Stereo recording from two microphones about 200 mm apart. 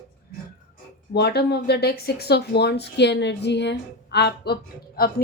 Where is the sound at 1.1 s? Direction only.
55° left (ahead or behind).